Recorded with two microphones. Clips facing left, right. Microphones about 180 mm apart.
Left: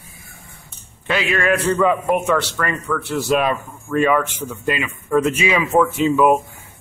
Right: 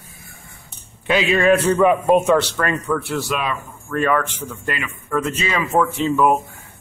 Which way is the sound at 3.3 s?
45° left (ahead or behind).